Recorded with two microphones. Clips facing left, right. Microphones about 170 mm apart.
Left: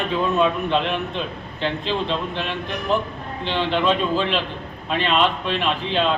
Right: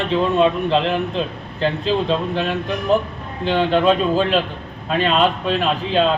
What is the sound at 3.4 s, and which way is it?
Speech, 45° right (ahead or behind).